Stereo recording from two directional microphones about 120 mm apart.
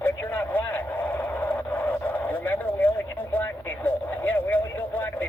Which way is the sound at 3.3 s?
15° left (ahead or behind).